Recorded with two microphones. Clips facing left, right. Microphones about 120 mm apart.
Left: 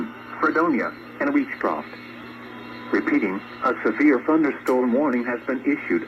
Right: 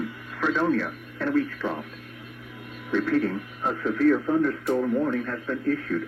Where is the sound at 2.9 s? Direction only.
65° left (ahead or behind).